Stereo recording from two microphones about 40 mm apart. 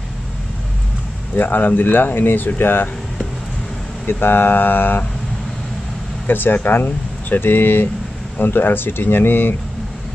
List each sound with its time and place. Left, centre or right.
1.3 s speech: left
4.1 s speech: left
6.2 s speech: left